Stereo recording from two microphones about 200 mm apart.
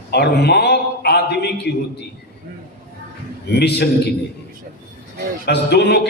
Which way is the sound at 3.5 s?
55° left (ahead or behind).